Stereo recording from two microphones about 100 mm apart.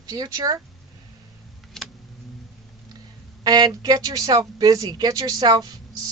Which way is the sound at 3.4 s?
45° right (ahead or behind).